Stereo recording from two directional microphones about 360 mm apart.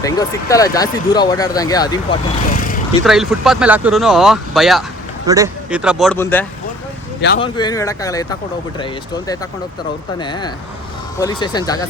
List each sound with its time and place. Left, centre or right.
0.0 s speech: centre
2.5 s vehicle: left
3.0 s speech: centre
7.2 s speech: left
7.4 s speech: centre